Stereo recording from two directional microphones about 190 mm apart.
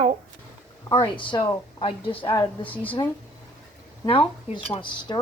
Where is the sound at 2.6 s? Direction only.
10° left (ahead or behind).